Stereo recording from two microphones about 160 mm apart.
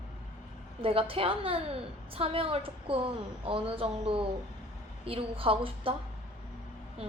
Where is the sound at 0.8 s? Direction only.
35° right (ahead or behind).